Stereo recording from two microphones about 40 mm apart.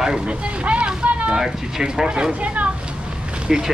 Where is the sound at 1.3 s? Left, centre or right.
Centre.